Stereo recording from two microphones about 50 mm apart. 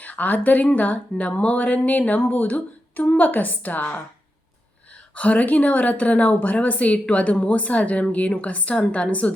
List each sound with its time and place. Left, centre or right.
0.0 s speech: left
5.1 s a woman's voice: left